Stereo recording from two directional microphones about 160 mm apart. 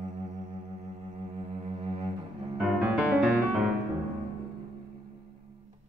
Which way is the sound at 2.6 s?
Centre (ahead or behind).